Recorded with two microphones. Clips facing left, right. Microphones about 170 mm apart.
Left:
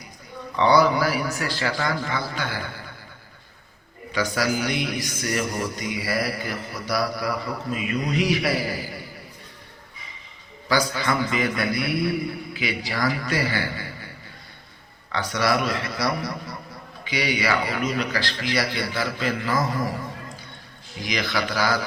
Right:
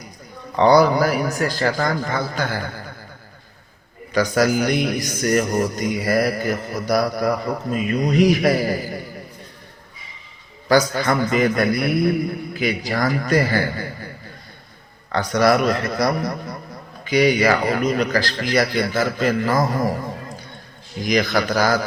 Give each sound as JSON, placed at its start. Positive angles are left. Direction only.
{"t": 0.5, "sound": "a man's voice", "side_deg": -40}
{"t": 4.1, "sound": "a man's voice", "side_deg": -45}
{"t": 10.7, "sound": "a man's voice", "side_deg": -45}
{"t": 15.1, "sound": "a man's voice", "side_deg": -45}
{"t": 21.0, "sound": "a man's voice", "side_deg": -45}